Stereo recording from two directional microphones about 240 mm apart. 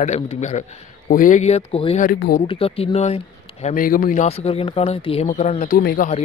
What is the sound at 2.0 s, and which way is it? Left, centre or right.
Speech, left.